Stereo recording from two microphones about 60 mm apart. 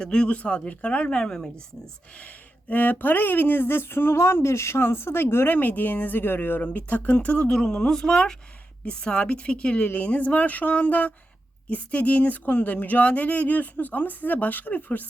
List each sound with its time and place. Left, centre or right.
0.0 s speech: centre
2.1 s speech: left